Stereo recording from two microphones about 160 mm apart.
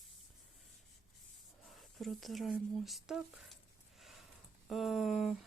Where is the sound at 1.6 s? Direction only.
Centre (ahead or behind).